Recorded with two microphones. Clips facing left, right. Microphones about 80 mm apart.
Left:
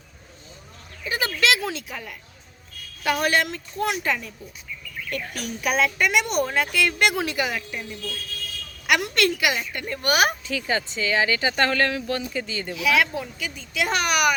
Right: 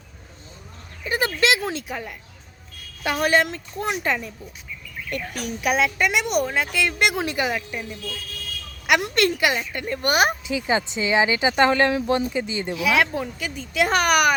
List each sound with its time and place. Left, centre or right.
1.1 s speech: right
3.0 s speech: right
5.1 s a woman's voice: centre
7.7 s speech: centre
8.9 s speech: right
10.4 s speech: centre; by 14.3 s right